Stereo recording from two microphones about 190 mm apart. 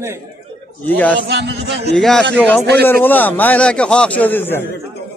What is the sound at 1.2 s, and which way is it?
Speech, 65° right (ahead or behind).